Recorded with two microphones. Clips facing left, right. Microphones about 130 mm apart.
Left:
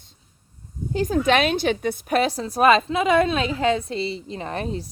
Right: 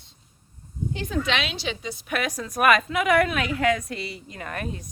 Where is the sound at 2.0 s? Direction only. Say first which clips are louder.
Left 6 dB; 30° left (ahead or behind).